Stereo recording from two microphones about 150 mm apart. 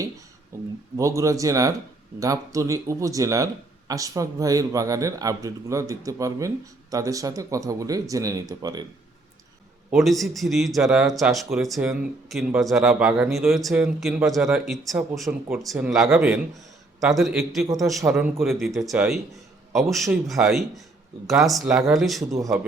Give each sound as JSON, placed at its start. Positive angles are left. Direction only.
{"t": 0.5, "sound": "speech", "side_deg": -20}
{"t": 9.9, "sound": "speech", "side_deg": 0}